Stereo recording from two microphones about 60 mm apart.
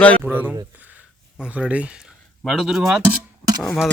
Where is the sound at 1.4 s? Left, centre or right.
Right.